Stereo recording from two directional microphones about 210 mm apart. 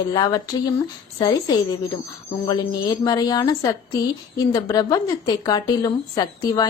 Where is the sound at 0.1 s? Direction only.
20° left (ahead or behind).